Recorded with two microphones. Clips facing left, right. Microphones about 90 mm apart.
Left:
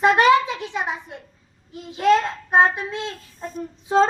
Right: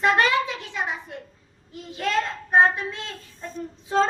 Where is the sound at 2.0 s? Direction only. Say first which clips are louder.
Left 7 dB; 20° left (ahead or behind).